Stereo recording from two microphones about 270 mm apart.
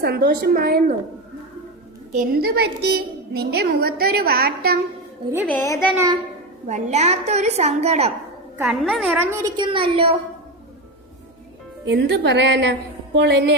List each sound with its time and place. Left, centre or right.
0.0 s a child's voice: right
2.1 s a child's voice: right
5.5 s speech: centre
5.9 s a woman's voice: centre
6.7 s a woman's voice: right
8.5 s a woman's voice: centre; by 10.2 s right
11.9 s a child's voice: right